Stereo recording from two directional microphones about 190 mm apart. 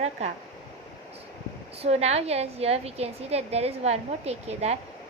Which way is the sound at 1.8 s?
35° right (ahead or behind).